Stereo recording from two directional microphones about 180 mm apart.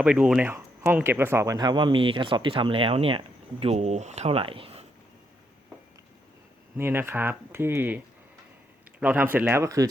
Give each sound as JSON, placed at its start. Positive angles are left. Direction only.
{"t": 0.0, "sound": "speech", "side_deg": -5}
{"t": 6.7, "sound": "speech", "side_deg": -10}